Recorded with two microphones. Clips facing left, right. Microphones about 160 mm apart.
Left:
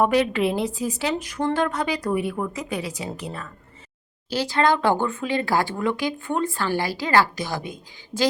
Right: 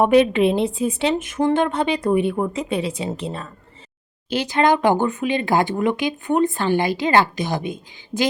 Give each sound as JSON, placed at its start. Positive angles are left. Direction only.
{"t": 0.0, "sound": "speech", "side_deg": -20}